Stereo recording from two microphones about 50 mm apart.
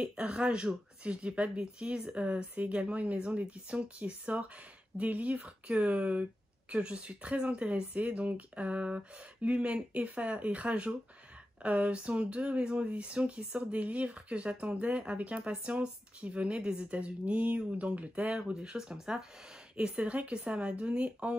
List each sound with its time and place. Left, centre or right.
0.2 s speech: centre
19.8 s speech: right